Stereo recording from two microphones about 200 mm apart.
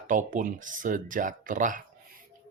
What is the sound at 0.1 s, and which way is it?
Speech, 40° right (ahead or behind).